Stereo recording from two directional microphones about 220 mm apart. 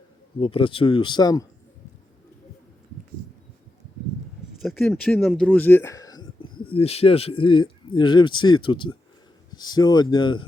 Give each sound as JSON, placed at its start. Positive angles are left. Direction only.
{"t": 0.3, "sound": "speech", "side_deg": 25}
{"t": 4.6, "sound": "speech", "side_deg": 0}